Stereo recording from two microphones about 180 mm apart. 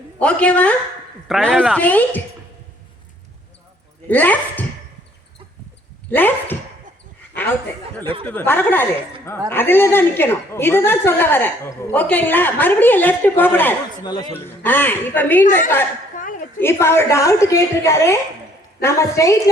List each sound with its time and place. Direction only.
0.2 s a woman's voice: 5° left (ahead or behind)
4.1 s a woman's voice: 10° left (ahead or behind)
6.1 s speech: 10° left (ahead or behind)
7.3 s chuckle: 10° left (ahead or behind)
8.0 s speech: 30° right (ahead or behind)
8.3 s a woman's voice: 10° left (ahead or behind)
14.0 s speech: 25° left (ahead or behind)
14.6 s a woman's voice: 10° left (ahead or behind)
16.6 s a woman's voice: 15° left (ahead or behind)